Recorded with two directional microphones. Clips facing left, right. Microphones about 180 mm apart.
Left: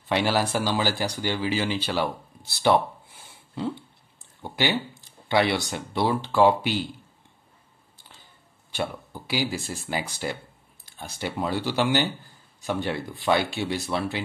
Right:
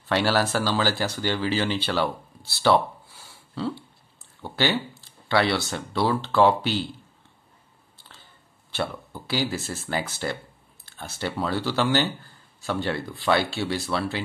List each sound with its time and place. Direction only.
0.1 s speech: 15° left (ahead or behind)
8.7 s speech: 15° left (ahead or behind)